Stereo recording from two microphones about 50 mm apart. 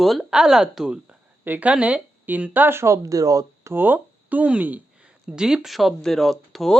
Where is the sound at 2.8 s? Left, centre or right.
Right.